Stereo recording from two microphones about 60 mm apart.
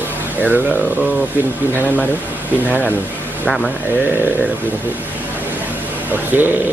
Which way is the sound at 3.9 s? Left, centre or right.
Right.